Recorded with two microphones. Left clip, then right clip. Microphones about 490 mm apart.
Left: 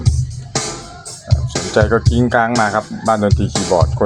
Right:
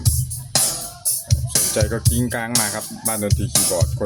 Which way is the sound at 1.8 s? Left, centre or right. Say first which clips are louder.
Left 14 dB; right.